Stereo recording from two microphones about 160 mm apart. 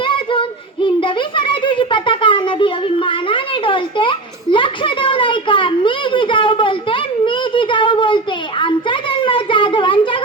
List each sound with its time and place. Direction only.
0.0 s child singing: 30° left (ahead or behind)